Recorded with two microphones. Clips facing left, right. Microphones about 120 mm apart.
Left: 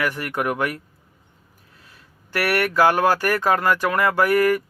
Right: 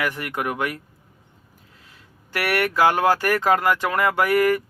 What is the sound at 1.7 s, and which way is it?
Speech, 20° right (ahead or behind).